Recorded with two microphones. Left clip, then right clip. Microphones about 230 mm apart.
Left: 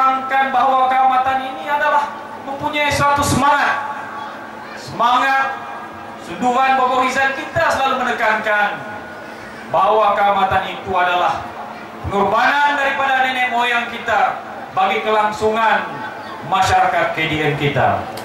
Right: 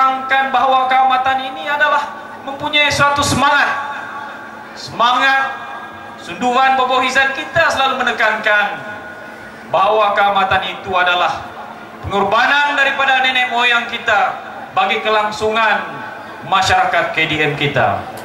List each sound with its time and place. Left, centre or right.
0.0 s a sound: centre
2.7 s speech: centre
5.0 s speech: centre
6.5 s speech: centre
9.8 s speech: centre